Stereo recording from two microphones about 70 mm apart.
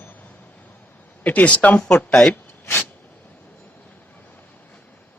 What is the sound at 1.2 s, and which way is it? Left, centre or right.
Speech, left.